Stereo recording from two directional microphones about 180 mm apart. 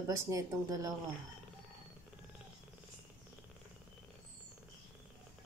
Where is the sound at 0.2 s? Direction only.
20° right (ahead or behind).